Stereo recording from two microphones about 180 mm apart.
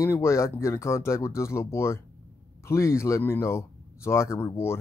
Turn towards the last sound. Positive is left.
turn(degrees=15)  # may be behind; listen again after turning